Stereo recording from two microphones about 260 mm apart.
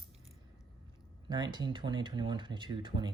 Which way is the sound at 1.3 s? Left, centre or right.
Centre.